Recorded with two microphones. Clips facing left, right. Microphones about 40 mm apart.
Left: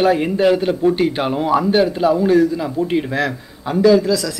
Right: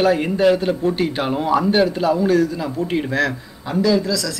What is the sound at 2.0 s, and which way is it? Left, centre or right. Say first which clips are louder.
Speech: left 3 dB; left.